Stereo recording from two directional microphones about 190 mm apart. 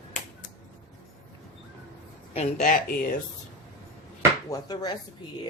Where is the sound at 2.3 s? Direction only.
40° left (ahead or behind).